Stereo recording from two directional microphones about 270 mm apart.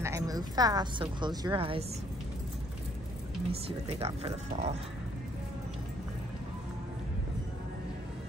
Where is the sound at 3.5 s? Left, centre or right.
Right.